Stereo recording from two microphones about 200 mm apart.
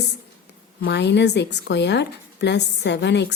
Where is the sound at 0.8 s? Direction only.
60° left (ahead or behind).